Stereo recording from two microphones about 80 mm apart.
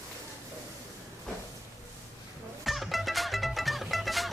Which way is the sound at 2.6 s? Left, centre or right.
Centre.